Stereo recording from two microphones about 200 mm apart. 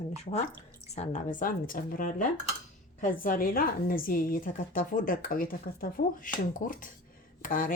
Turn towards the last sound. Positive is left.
turn(degrees=45)  # may be behind; listen again after turning